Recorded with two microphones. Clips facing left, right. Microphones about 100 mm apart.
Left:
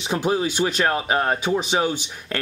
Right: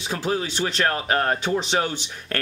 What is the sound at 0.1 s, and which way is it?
Speech, 15° left (ahead or behind).